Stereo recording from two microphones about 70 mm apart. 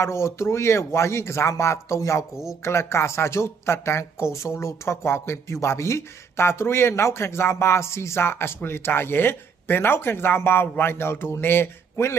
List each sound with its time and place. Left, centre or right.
0.0 s speech: left